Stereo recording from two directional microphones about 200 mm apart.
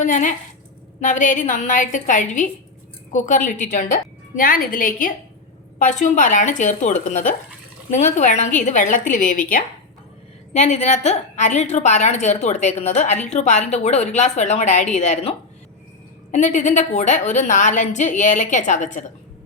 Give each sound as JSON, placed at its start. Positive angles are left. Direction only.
{"t": 0.0, "sound": "a woman's voice", "side_deg": 40}